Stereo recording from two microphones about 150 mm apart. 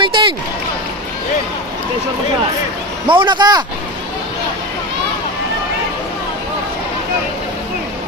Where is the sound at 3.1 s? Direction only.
30° right (ahead or behind).